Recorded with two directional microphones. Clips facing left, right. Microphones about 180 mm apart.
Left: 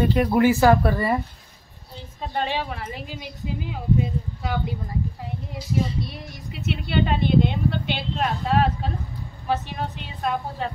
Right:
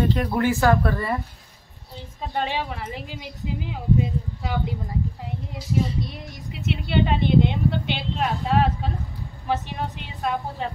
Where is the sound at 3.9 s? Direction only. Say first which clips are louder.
Right 1 dB; 20° right (ahead or behind).